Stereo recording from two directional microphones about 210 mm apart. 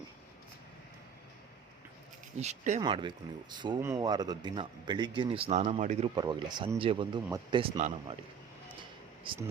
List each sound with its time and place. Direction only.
2.4 s speech: 35° right (ahead or behind)
2.8 s a man's voice: 20° right (ahead or behind)
6.1 s a man's voice: 20° right (ahead or behind)
7.6 s speech: 35° right (ahead or behind)
9.2 s speech: 25° right (ahead or behind)